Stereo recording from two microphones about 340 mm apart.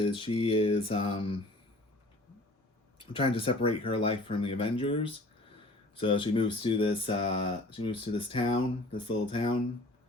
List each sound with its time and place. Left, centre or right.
0.0 s speech: centre
3.2 s speech: centre